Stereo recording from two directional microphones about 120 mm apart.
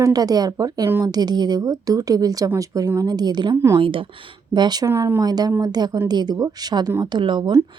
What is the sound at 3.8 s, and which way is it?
Speech, 45° right (ahead or behind).